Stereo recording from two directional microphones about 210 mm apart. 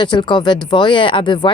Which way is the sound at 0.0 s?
20° left (ahead or behind).